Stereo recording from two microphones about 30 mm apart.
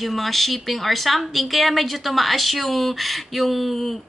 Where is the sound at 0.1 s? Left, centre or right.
Centre.